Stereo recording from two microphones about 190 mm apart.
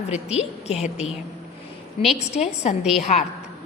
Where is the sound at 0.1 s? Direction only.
35° left (ahead or behind).